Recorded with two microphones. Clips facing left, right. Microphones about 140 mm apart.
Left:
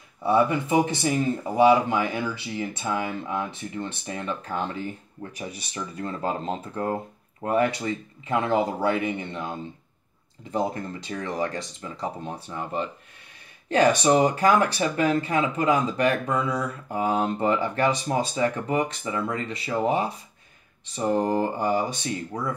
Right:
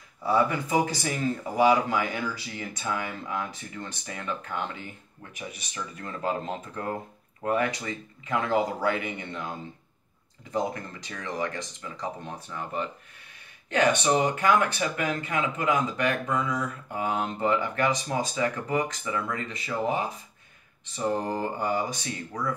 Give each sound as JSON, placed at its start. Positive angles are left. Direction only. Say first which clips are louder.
{"t": 0.2, "sound": "speech", "louder": "left 3 dB", "side_deg": 25}
{"t": 10.5, "sound": "speech", "louder": "left 3 dB", "side_deg": 30}